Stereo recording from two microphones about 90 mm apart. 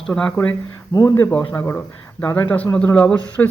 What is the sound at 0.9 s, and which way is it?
Speech, 50° left (ahead or behind).